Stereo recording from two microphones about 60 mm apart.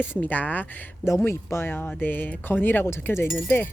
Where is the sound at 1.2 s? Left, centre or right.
Left.